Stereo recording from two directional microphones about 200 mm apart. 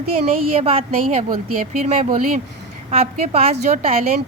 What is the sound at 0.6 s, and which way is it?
A woman's voice, 30° right (ahead or behind).